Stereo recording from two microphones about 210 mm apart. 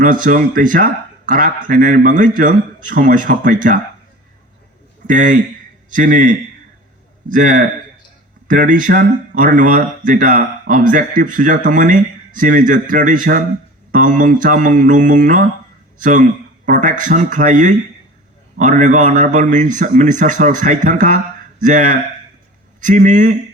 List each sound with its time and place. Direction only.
0.0 s speech: 40° right (ahead or behind)
5.0 s speech: 40° right (ahead or behind)
16.6 s speech: 40° right (ahead or behind)